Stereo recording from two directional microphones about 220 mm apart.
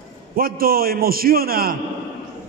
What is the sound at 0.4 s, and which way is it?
A man's voice, 40° right (ahead or behind).